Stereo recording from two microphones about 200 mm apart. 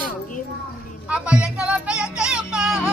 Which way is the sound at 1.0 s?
5° right (ahead or behind).